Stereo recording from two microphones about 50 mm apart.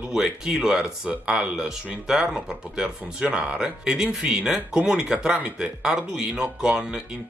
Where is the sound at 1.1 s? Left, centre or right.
Right.